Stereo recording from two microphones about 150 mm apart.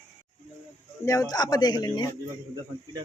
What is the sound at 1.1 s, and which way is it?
Speech, 25° left (ahead or behind).